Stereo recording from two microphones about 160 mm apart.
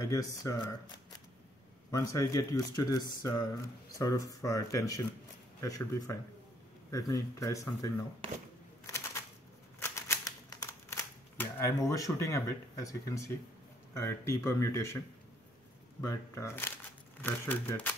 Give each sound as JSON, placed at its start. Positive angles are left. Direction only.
{"t": 0.0, "sound": "speech", "side_deg": 20}
{"t": 1.9, "sound": "speech", "side_deg": 20}
{"t": 8.8, "sound": "a sound", "side_deg": 15}
{"t": 9.8, "sound": "typewriter", "side_deg": 15}
{"t": 13.9, "sound": "speech", "side_deg": 15}
{"t": 16.0, "sound": "speech", "side_deg": 20}